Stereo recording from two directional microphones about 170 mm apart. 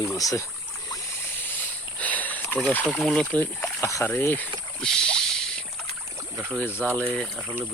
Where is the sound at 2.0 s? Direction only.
10° left (ahead or behind).